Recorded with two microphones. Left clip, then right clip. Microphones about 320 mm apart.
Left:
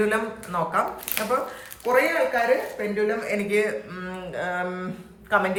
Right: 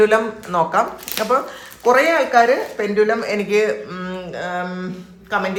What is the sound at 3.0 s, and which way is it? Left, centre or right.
A man's voice, centre.